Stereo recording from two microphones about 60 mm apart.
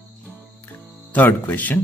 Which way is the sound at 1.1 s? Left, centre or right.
Left.